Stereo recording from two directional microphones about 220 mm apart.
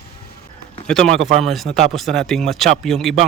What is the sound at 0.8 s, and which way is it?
Speech, 5° left (ahead or behind).